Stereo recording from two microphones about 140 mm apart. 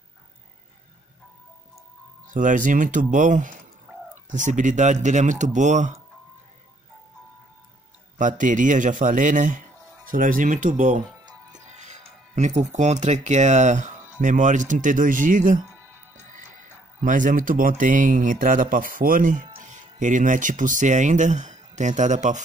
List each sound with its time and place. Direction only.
2.3 s speech: 70° right (ahead or behind)
8.2 s speech: 65° right (ahead or behind)
10.0 s speech: 75° right (ahead or behind)
17.0 s speech: 65° right (ahead or behind)
19.6 s speech: 65° right (ahead or behind)